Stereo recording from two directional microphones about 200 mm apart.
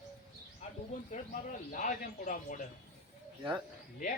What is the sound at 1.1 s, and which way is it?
Speech, 40° left (ahead or behind).